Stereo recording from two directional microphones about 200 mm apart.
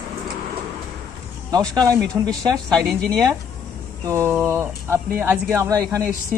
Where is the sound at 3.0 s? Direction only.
5° left (ahead or behind).